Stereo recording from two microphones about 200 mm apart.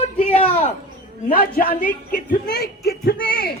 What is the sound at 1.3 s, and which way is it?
A man's voice, 45° left (ahead or behind).